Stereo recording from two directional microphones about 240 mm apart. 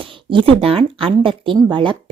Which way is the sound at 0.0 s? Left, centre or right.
Right.